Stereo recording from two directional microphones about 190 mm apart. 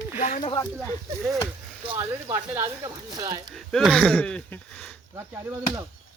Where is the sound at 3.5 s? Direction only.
Centre (ahead or behind).